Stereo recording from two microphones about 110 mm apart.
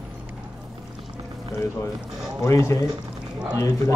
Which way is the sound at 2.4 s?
25° left (ahead or behind).